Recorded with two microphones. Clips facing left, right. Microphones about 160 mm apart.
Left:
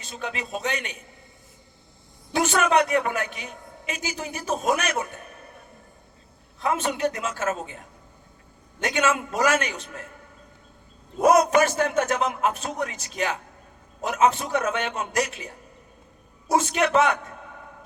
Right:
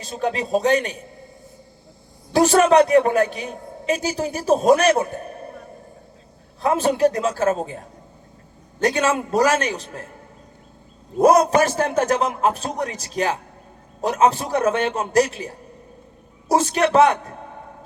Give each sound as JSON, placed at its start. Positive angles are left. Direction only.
{"t": 0.0, "sound": "a woman's voice", "side_deg": -35}
{"t": 2.3, "sound": "a woman's voice", "side_deg": -35}
{"t": 6.6, "sound": "a woman's voice", "side_deg": -35}
{"t": 11.2, "sound": "a woman's voice", "side_deg": -35}